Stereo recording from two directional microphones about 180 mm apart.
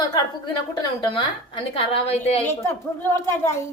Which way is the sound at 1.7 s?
35° left (ahead or behind).